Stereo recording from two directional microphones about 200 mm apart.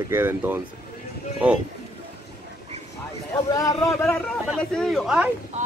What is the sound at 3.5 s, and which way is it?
Speech, 15° left (ahead or behind).